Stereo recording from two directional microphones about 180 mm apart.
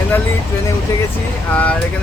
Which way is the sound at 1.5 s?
10° left (ahead or behind).